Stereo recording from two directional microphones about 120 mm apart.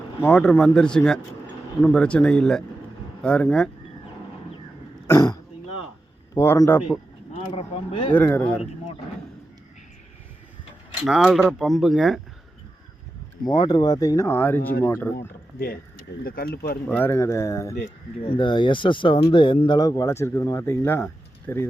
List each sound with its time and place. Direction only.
0.2 s speech: 20° left (ahead or behind)
0.6 s speech: 5° left (ahead or behind)
6.3 s speech: 25° left (ahead or behind)
7.3 s speech: 50° left (ahead or behind)
8.1 s speech: 15° left (ahead or behind)
11.0 s speech: 5° right (ahead or behind)
13.5 s speech: 35° left (ahead or behind); by 15.3 s 20° left (ahead or behind)
16.9 s speech: 20° left (ahead or behind)
17.7 s speech: 70° left (ahead or behind)
18.3 s speech: 40° left (ahead or behind); by 21.7 s 20° left (ahead or behind)